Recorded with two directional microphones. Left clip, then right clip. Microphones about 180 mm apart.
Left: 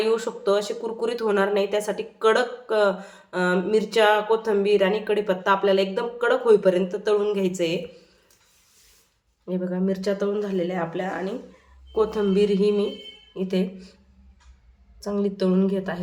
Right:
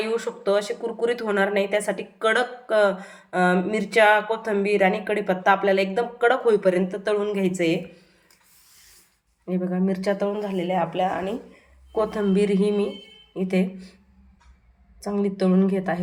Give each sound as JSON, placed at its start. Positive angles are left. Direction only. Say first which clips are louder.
{"t": 0.0, "sound": "speech", "louder": "left 2 dB", "side_deg": -15}
{"t": 9.5, "sound": "speech", "louder": "even", "side_deg": -15}
{"t": 15.0, "sound": "speech", "louder": "even", "side_deg": -15}